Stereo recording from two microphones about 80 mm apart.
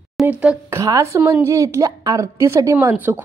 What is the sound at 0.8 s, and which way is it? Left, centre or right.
A woman's voice, right.